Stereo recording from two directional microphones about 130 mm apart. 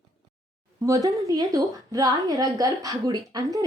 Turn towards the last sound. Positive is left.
turn(degrees=-30)  # may be behind; listen again after turning